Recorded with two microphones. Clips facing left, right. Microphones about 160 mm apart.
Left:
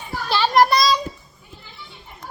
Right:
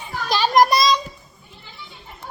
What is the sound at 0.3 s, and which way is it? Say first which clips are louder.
Children playing: even; 15° right (ahead or behind).